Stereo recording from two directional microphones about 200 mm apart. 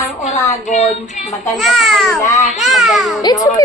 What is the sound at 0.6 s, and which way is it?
Speech, 35° left (ahead or behind).